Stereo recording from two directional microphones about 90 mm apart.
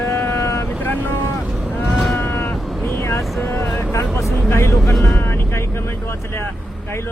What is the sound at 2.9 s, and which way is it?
Vehicle, 30° left (ahead or behind).